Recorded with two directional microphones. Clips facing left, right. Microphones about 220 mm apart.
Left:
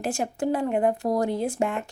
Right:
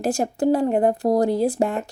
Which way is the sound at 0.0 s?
40° right (ahead or behind).